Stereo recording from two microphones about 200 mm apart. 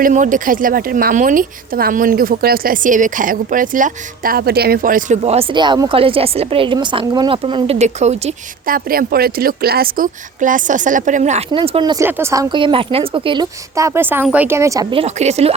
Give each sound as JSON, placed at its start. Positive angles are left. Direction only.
{"t": 0.0, "sound": "a woman's voice", "side_deg": -40}
{"t": 15.0, "sound": "a woman's voice", "side_deg": -35}